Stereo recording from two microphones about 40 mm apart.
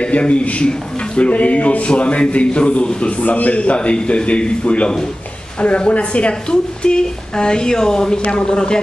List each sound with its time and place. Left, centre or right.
0.0 s a man's voice: left